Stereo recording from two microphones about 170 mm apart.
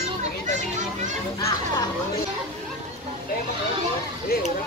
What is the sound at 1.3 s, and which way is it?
Children playing, 20° left (ahead or behind).